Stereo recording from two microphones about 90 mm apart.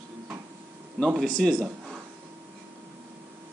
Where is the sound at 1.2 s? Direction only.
5° left (ahead or behind).